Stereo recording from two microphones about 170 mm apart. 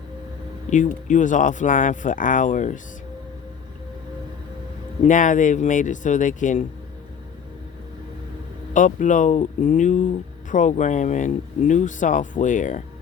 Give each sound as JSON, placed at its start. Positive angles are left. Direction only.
{"t": 0.7, "sound": "speech", "side_deg": 45}
{"t": 5.0, "sound": "speech", "side_deg": 50}
{"t": 8.7, "sound": "speech", "side_deg": 50}